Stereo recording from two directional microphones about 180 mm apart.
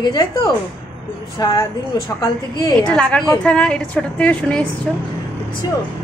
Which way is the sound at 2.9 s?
5° left (ahead or behind).